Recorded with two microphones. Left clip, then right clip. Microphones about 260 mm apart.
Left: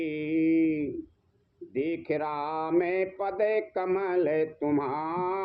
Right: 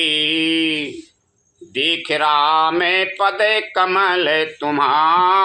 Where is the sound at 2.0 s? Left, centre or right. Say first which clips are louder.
Right 15 dB; right.